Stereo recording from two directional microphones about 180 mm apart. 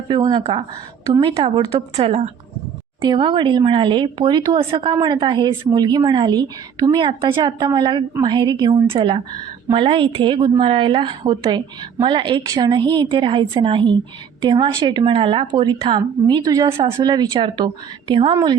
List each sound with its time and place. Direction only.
0.1 s a woman's voice: 25° right (ahead or behind)